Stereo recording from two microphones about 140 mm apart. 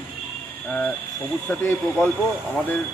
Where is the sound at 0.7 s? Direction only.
10° left (ahead or behind).